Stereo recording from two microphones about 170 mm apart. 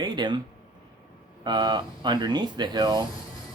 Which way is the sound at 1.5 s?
25° right (ahead or behind).